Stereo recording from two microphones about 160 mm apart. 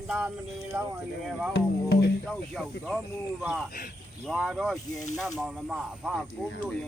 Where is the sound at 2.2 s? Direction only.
5° left (ahead or behind).